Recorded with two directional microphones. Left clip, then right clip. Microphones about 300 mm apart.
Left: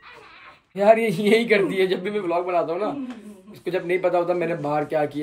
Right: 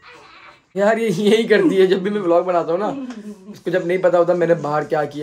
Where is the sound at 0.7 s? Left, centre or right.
Centre.